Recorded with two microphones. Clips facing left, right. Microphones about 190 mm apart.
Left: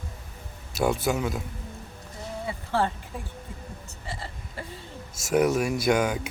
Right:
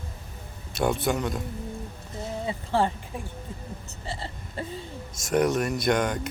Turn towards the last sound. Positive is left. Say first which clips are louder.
# left 1 dB
turn(degrees=5)  # may be behind; listen again after turning